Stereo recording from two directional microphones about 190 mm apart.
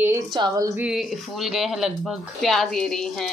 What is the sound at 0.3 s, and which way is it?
Speech, 20° right (ahead or behind).